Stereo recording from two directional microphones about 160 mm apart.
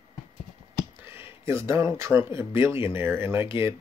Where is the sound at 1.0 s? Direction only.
15° right (ahead or behind).